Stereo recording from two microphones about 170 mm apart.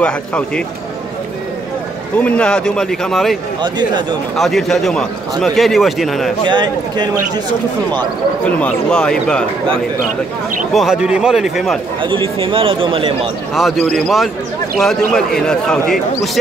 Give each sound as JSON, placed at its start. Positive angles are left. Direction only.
{"t": 0.0, "sound": "speech", "side_deg": 5}
{"t": 2.1, "sound": "a man's voice", "side_deg": 10}
{"t": 3.6, "sound": "speech", "side_deg": -25}
{"t": 4.4, "sound": "a man's voice", "side_deg": 0}
{"t": 6.4, "sound": "speech", "side_deg": -25}
{"t": 8.5, "sound": "a man's voice", "side_deg": 5}
{"t": 10.7, "sound": "a man's voice", "side_deg": 0}
{"t": 12.0, "sound": "speech", "side_deg": -30}
{"t": 13.6, "sound": "a man's voice", "side_deg": 0}